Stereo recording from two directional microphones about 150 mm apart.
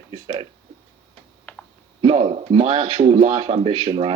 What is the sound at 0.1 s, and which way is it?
Speech, 35° right (ahead or behind).